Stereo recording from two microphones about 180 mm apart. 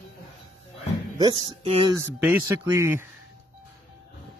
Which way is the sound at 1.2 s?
25° right (ahead or behind).